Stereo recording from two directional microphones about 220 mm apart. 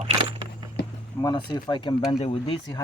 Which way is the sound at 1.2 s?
20° left (ahead or behind).